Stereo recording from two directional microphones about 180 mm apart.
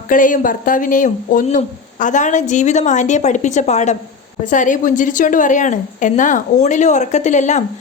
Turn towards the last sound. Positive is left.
turn(degrees=40)  # may be behind; listen again after turning